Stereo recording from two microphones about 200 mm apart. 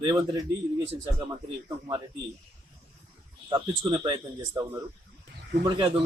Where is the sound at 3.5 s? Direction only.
25° right (ahead or behind).